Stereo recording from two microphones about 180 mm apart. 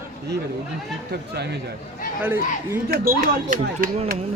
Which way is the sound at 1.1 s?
65° right (ahead or behind).